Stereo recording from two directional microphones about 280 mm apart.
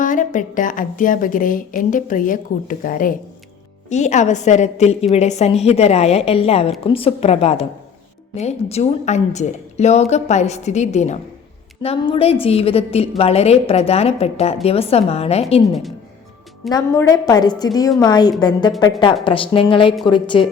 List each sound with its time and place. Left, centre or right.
0.0 s a woman's voice: left
16.6 s a woman's voice: centre